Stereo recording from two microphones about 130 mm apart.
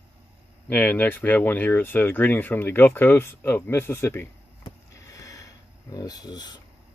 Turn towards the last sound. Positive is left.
turn(degrees=30)  # may be behind; listen again after turning